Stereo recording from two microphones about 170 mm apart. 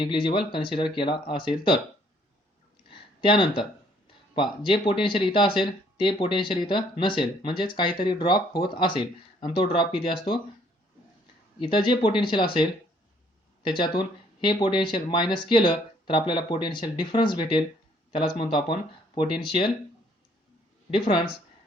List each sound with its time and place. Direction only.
0.0 s speech: 30° left (ahead or behind)
2.9 s a sound: 30° left (ahead or behind)
4.4 s speech: 30° left (ahead or behind)
11.6 s speech: 30° left (ahead or behind)
20.9 s speech: 30° left (ahead or behind)